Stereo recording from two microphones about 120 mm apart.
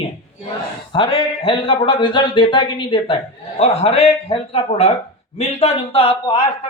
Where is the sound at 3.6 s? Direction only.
60° left (ahead or behind).